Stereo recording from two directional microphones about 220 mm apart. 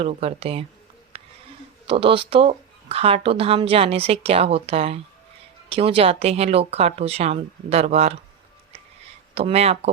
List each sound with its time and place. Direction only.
0.0 s speech: 25° right (ahead or behind)
1.1 s a sound: 25° right (ahead or behind)
1.9 s speech: 25° right (ahead or behind)
9.3 s speech: 30° right (ahead or behind)